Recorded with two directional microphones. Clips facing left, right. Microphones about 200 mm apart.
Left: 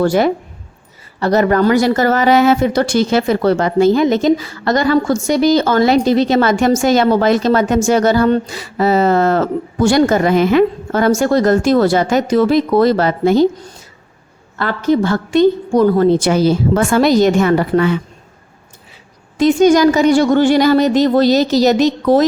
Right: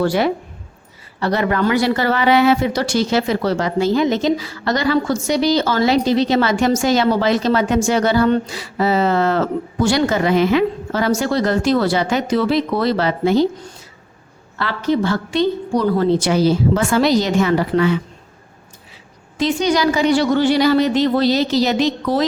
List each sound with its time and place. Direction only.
0.0 s speech: 45° left (ahead or behind)
19.4 s speech: 50° left (ahead or behind)